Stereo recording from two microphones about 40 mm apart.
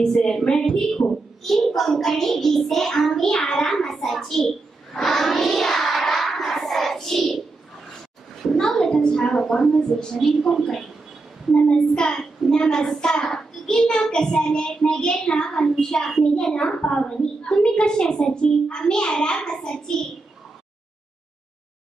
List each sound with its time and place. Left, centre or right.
0.0 s a woman's voice: centre
1.4 s a child's voice: centre
2.0 s child singing: centre
8.4 s a woman's voice: centre
11.7 s a child's voice: left
16.0 s a child's voice: centre
16.3 s a child's voice: left
16.8 s a woman's voice: left